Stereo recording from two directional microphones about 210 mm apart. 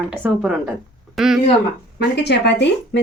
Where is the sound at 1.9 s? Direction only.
55° left (ahead or behind).